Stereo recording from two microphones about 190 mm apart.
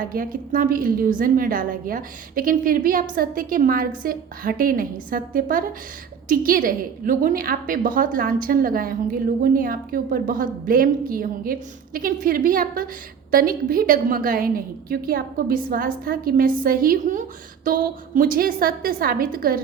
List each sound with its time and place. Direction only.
0.0 s a woman's voice: 45° right (ahead or behind)